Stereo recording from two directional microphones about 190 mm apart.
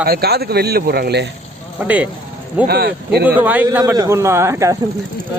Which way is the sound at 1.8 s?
10° right (ahead or behind).